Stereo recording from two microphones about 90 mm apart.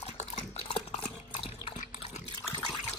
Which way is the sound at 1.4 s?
90° left.